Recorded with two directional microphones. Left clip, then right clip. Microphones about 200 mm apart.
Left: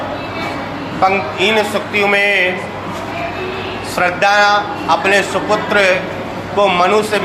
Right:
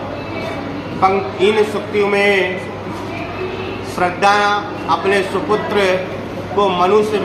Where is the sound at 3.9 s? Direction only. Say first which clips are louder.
Left 2 dB; 20° left (ahead or behind).